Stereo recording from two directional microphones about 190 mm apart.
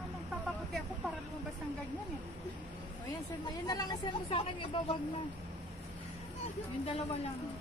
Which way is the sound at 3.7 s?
20° left (ahead or behind).